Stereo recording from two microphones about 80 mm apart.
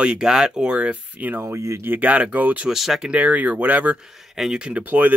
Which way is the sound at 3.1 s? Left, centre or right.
Centre.